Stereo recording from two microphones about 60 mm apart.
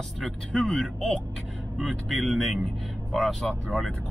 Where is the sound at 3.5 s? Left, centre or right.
Centre.